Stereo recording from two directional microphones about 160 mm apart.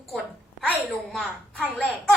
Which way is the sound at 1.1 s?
Centre (ahead or behind).